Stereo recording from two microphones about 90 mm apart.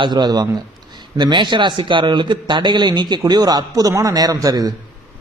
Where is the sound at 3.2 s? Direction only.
45° right (ahead or behind).